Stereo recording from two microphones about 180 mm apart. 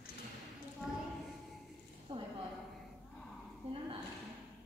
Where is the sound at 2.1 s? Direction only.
25° right (ahead or behind).